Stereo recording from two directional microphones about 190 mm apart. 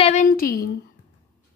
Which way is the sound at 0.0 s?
40° left (ahead or behind).